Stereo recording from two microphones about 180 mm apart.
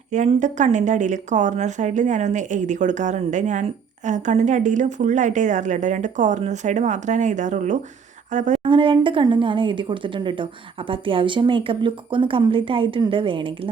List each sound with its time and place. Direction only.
0.1 s a woman's voice: 40° right (ahead or behind)
8.6 s a woman's voice: 30° right (ahead or behind)